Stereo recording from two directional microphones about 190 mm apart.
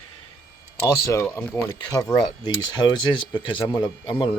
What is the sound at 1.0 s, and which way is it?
Speech, 10° left (ahead or behind).